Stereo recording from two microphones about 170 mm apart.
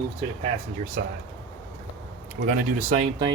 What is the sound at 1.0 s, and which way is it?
Speech, 60° right (ahead or behind).